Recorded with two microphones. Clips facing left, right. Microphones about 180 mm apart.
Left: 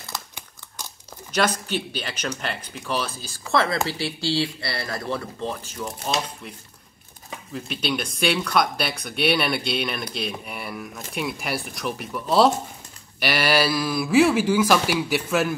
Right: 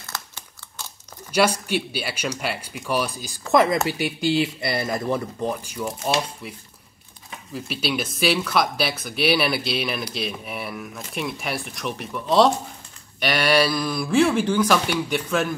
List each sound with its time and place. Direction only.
1.3 s speech: 10° right (ahead or behind)
7.5 s speech: 5° right (ahead or behind)